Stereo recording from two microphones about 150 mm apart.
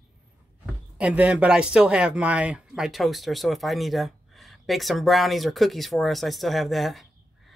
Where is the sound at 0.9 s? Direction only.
10° right (ahead or behind).